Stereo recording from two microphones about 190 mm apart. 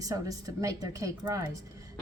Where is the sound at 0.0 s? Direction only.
20° right (ahead or behind).